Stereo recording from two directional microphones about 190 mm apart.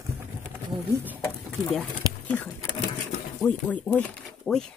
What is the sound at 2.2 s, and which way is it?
Speech, 5° left (ahead or behind).